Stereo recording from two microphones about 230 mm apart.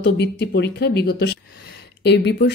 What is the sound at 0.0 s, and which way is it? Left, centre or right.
Speech, left.